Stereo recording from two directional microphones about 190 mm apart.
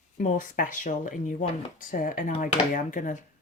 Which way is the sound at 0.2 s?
45° left (ahead or behind).